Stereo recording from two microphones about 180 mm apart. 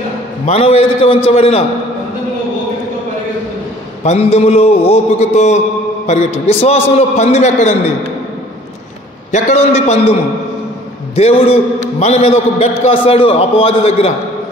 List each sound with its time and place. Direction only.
0.5 s a man's voice: 35° left (ahead or behind)
4.0 s a man's voice: 35° left (ahead or behind)
9.3 s a man's voice: 40° left (ahead or behind)
11.1 s a man's voice: 35° left (ahead or behind)